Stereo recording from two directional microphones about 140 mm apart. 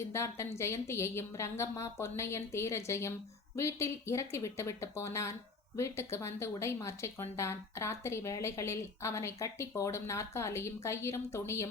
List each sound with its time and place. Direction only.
0.1 s speech: 20° left (ahead or behind)